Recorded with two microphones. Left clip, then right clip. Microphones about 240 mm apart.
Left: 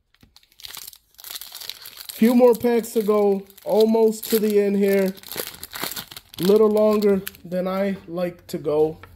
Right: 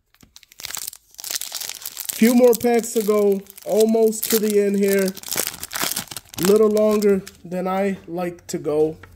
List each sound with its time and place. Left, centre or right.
0.7 s crunch: right
2.1 s speech: centre
4.2 s speech: right
4.5 s speech: centre
5.2 s crumpling: right
6.5 s speech: centre